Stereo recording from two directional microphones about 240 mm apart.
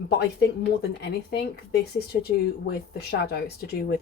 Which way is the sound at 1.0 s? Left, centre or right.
Left.